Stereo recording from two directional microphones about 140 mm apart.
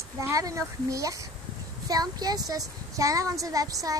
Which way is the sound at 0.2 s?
25° right (ahead or behind).